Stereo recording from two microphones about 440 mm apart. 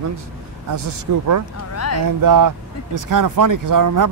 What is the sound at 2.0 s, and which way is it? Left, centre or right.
Speech, right.